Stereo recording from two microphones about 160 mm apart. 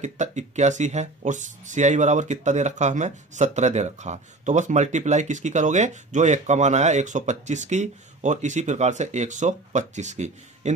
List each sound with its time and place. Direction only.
0.0 s speech: 45° right (ahead or behind)